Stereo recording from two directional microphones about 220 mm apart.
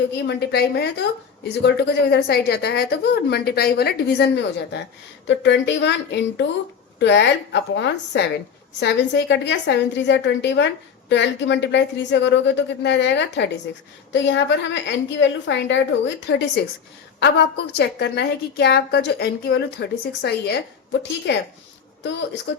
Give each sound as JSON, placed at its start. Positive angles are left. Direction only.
{"t": 0.2, "sound": "a woman's voice", "side_deg": 50}
{"t": 22.5, "sound": "speech", "side_deg": 55}